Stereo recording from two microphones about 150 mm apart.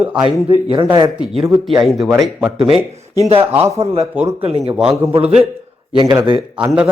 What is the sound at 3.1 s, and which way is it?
A man's voice, 40° right (ahead or behind).